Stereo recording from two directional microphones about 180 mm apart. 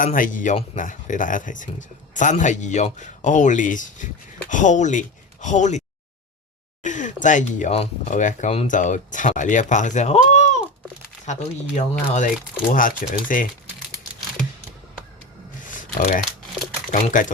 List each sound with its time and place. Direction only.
0.0 s speech: 50° left (ahead or behind)
6.8 s speech: 45° left (ahead or behind)
11.7 s speech: 45° left (ahead or behind)
15.7 s shuffling cards: 45° left (ahead or behind)
16.9 s speech: 45° left (ahead or behind)